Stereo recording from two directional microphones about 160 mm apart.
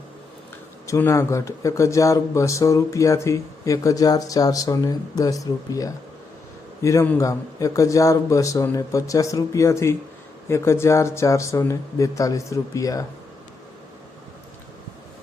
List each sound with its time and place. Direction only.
0.9 s speech: 15° left (ahead or behind)